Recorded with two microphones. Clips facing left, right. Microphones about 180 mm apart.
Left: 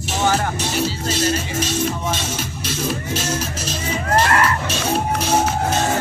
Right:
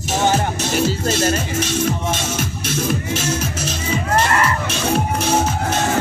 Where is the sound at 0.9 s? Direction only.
50° right (ahead or behind).